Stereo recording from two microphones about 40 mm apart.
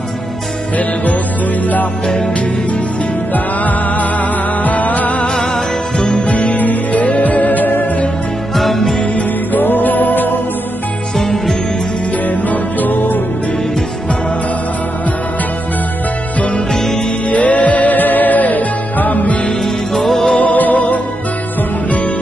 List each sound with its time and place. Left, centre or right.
3.3 s music: left
5.9 s music: left
6.3 s music: left
8.5 s music: centre
9.1 s music: left
11.1 s music: centre
12.3 s music: left
16.3 s music: left
16.7 s music: centre
17.3 s music: left
19.6 s music: centre
20.3 s music: left